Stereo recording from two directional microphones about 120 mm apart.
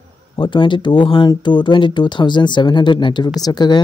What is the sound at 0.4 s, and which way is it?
Speech, 40° left (ahead or behind).